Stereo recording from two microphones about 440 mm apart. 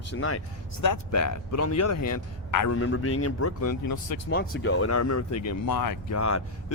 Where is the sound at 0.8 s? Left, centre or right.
Left.